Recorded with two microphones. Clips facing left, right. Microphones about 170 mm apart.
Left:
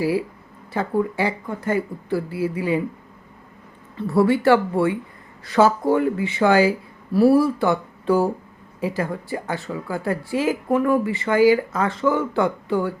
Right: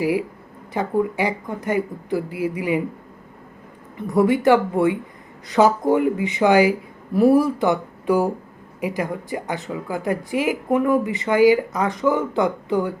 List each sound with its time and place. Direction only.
0.0 s speech: 15° right (ahead or behind)
3.9 s speech: 15° right (ahead or behind)